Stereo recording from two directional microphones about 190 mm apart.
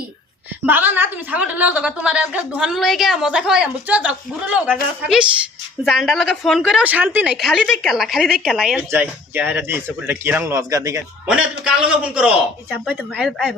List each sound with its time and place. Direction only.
0.6 s a woman's voice: 10° right (ahead or behind)
11.3 s a woman's voice: 5° right (ahead or behind)